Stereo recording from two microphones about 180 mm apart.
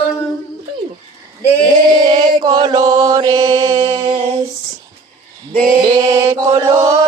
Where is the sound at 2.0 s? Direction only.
20° right (ahead or behind).